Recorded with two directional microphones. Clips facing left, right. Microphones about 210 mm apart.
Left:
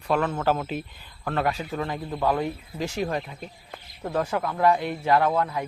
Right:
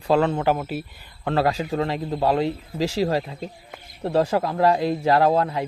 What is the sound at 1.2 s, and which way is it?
Speech, 30° right (ahead or behind).